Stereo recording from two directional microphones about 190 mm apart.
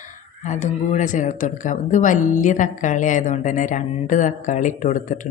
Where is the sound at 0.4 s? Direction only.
40° left (ahead or behind).